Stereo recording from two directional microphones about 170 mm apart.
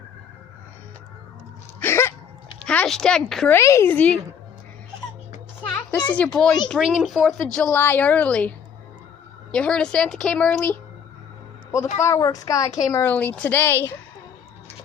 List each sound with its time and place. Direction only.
1.8 s a sound: 15° left (ahead or behind)
2.6 s speech: 5° left (ahead or behind)
3.6 s a woman's voice: 15° left (ahead or behind)
6.1 s a woman's voice: 10° left (ahead or behind)
12.0 s a woman's voice: 20° left (ahead or behind)